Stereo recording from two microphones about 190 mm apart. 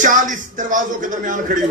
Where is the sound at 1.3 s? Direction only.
45° right (ahead or behind).